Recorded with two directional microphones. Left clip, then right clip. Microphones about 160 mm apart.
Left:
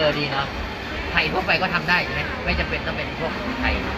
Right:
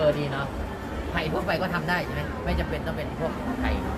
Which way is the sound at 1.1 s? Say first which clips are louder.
Left 7 dB; 35° right (ahead or behind).